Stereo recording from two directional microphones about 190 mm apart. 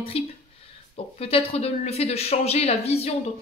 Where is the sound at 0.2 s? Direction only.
30° left (ahead or behind).